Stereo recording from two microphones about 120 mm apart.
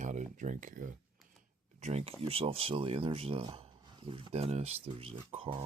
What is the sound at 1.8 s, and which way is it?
Speech, 65° right (ahead or behind).